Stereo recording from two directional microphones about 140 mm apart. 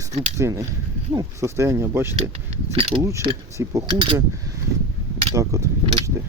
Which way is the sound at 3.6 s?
20° right (ahead or behind).